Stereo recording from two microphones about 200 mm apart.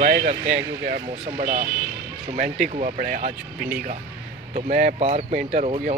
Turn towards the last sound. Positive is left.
turn(degrees=-35)  # may be behind; listen again after turning